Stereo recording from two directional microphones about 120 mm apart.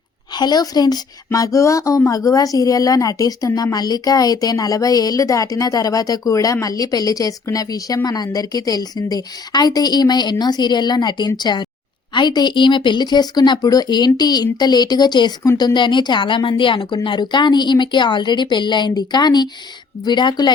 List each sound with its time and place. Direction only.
0.3 s speech: 35° left (ahead or behind)